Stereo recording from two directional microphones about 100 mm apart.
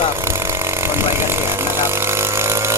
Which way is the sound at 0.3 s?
25° right (ahead or behind).